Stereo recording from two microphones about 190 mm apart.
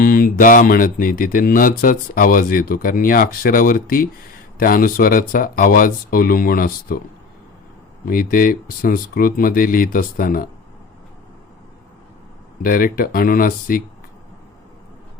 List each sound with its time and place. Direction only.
0.0 s speech: 45° left (ahead or behind)
8.0 s speech: 50° left (ahead or behind)
12.6 s speech: 50° left (ahead or behind)